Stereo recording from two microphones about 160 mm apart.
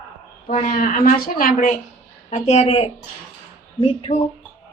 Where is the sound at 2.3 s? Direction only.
45° left (ahead or behind).